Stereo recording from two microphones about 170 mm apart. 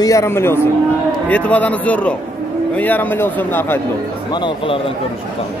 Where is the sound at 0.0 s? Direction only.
20° left (ahead or behind).